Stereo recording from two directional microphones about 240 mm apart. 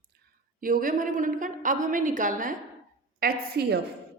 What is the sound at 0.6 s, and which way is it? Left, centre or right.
A woman's voice, right.